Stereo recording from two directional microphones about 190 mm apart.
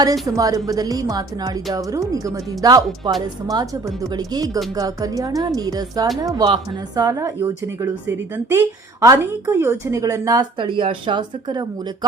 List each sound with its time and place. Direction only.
0.0 s a woman's voice: 20° right (ahead or behind)